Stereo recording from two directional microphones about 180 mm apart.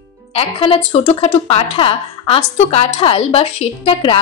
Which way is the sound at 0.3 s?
30° left (ahead or behind).